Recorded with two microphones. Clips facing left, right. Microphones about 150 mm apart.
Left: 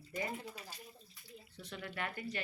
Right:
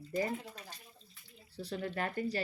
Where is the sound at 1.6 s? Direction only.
35° right (ahead or behind).